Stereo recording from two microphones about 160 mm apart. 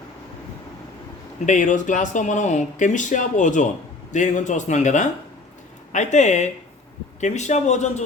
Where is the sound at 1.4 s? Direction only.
50° left (ahead or behind).